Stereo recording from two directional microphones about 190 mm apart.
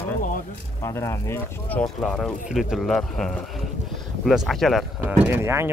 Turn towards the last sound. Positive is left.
turn(degrees=-15)  # may be behind; listen again after turning